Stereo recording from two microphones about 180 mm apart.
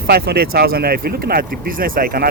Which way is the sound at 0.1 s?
60° right (ahead or behind).